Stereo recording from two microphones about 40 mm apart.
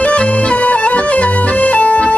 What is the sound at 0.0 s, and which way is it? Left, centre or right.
Music, left.